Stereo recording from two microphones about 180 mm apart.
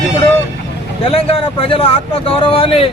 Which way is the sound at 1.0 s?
30° left (ahead or behind).